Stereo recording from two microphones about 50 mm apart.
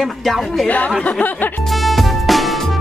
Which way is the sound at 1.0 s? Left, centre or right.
Left.